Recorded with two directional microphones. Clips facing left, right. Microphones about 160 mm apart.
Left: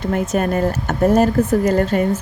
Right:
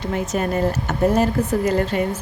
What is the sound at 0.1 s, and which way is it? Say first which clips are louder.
A woman's voice: left 3 dB; 50° left (ahead or behind).